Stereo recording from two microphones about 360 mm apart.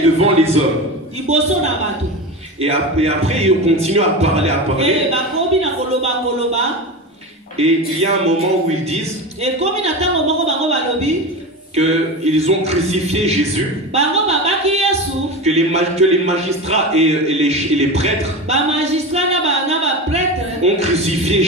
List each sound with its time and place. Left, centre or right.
0.2 s a man's voice: centre
2.6 s speech: centre
13.9 s a sound: centre
15.4 s a man's voice: centre